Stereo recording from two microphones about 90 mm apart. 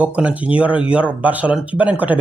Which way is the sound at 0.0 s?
15° right (ahead or behind).